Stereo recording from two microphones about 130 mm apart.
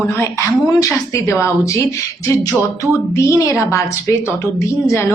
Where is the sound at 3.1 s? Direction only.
25° left (ahead or behind).